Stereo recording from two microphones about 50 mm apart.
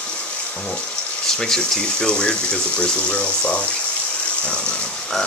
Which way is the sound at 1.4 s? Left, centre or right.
Centre.